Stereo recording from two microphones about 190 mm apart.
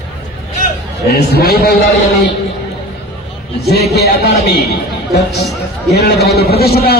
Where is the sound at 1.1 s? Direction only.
60° left (ahead or behind).